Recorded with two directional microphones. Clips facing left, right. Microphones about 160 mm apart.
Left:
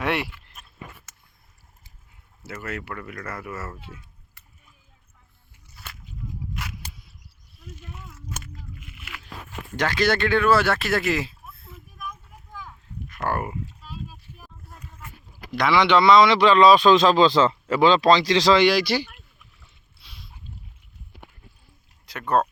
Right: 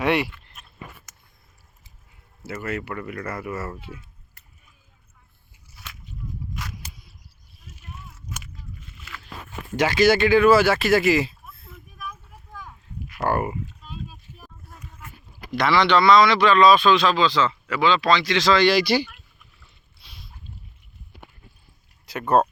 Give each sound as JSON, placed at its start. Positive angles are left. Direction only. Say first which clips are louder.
{"t": 0.0, "sound": "a sound", "louder": "right 4 dB", "side_deg": 0}
{"t": 2.5, "sound": "speech", "louder": "right 4 dB", "side_deg": -5}
{"t": 9.7, "sound": "speech", "louder": "right 4 dB", "side_deg": -5}
{"t": 12.6, "sound": "a sound", "louder": "even", "side_deg": -10}
{"t": 15.6, "sound": "speech", "louder": "even", "side_deg": 15}
{"t": 16.9, "sound": "speech", "louder": "left 3 dB", "side_deg": 40}
{"t": 18.6, "sound": "speech", "louder": "even", "side_deg": 10}
{"t": 22.0, "sound": "speech", "louder": "right 3 dB", "side_deg": -10}